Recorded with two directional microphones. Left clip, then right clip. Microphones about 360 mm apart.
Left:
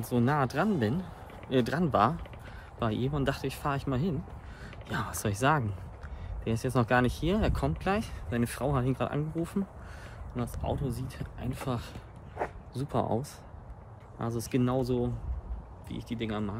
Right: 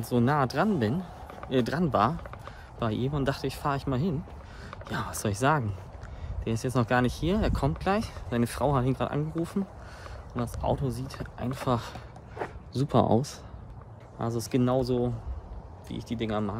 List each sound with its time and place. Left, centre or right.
0.0 s speech: centre; by 13.4 s right
14.1 s speech: centre